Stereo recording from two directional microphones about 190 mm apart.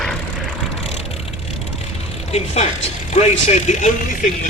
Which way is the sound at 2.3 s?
35° left (ahead or behind).